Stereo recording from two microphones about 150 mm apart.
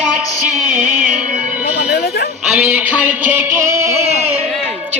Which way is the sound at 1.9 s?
90° left.